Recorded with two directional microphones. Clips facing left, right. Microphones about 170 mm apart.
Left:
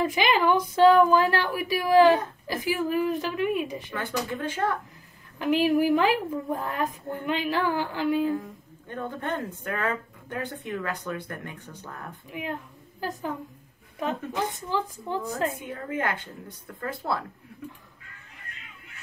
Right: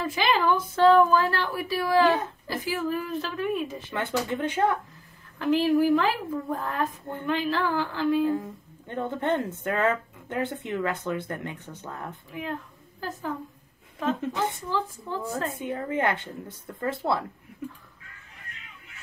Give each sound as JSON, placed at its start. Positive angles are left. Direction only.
{"t": 0.0, "sound": "a woman's voice", "side_deg": 15}
{"t": 3.9, "sound": "speech", "side_deg": -20}
{"t": 5.4, "sound": "a woman's voice", "side_deg": 15}
{"t": 8.3, "sound": "speech", "side_deg": -20}
{"t": 12.3, "sound": "a woman's voice", "side_deg": 15}
{"t": 15.6, "sound": "speech", "side_deg": -25}